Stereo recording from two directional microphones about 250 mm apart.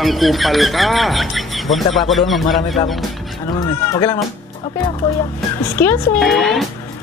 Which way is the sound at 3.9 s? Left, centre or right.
Centre.